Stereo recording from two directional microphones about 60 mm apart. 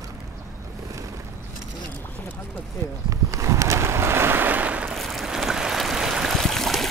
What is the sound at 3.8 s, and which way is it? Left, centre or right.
Boat, right.